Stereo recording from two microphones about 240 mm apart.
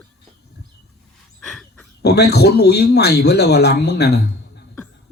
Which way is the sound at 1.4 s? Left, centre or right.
Centre.